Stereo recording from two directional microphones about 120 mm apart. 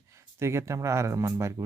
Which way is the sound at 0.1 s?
25° right (ahead or behind).